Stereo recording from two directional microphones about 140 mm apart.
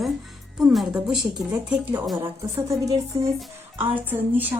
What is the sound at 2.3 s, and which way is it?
A woman's voice, 20° right (ahead or behind).